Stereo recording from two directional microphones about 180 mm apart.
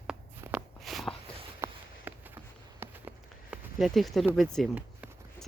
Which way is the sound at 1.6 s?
10° right (ahead or behind).